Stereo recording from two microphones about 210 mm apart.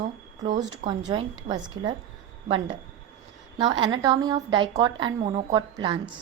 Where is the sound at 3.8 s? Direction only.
20° right (ahead or behind).